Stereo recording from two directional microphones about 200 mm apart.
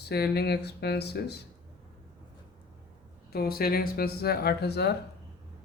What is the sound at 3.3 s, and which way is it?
Speech, 50° left (ahead or behind).